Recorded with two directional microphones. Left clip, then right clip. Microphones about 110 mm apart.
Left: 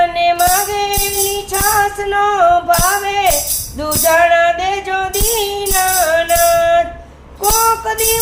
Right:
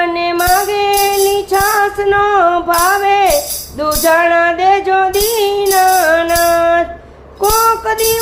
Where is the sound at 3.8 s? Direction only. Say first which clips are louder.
Right 1 dB; 25° right (ahead or behind).